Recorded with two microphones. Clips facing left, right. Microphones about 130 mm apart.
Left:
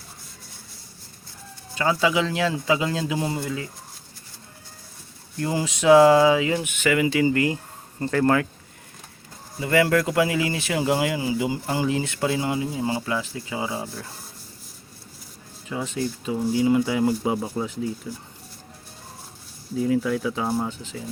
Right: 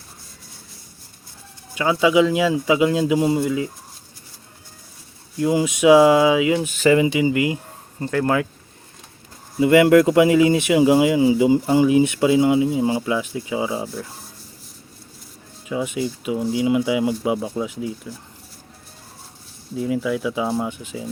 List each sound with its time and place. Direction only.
1.7 s speech: 10° right (ahead or behind)
5.4 s speech: 15° right (ahead or behind)
6.6 s speech: 35° right (ahead or behind); by 8.4 s 5° right (ahead or behind)
9.6 s speech: 20° right (ahead or behind)
15.7 s speech: 10° right (ahead or behind)
19.7 s speech: centre (ahead or behind)